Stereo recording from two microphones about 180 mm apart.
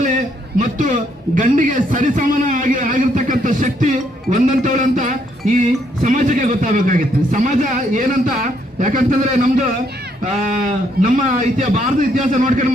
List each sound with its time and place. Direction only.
0.6 s a man's voice: 45° right (ahead or behind)